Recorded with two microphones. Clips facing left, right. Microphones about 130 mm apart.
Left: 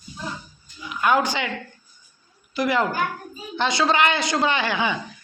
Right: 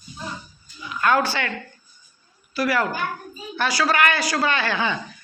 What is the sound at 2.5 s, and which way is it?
A woman's voice, 20° left (ahead or behind).